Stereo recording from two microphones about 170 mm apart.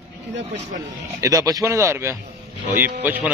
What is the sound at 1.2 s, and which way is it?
A man's voice, 20° right (ahead or behind).